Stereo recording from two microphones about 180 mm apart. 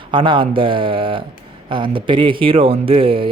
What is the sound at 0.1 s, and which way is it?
A man's voice, 30° right (ahead or behind).